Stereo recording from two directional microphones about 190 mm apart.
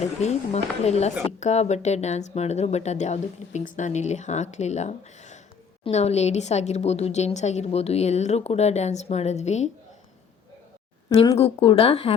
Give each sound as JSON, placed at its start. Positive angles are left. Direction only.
{"t": 0.0, "sound": "speech", "side_deg": 35}
{"t": 11.3, "sound": "speech", "side_deg": 35}